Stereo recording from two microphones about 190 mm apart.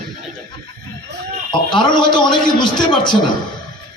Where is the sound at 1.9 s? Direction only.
25° left (ahead or behind).